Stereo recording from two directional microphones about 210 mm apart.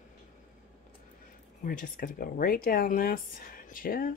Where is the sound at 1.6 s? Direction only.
40° left (ahead or behind).